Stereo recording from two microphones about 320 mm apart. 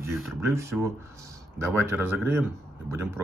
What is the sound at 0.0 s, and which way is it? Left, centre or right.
Speech, centre.